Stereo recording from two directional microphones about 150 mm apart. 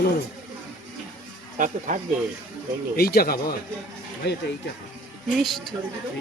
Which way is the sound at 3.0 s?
90° left.